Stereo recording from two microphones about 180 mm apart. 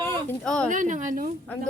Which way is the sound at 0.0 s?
10° left (ahead or behind).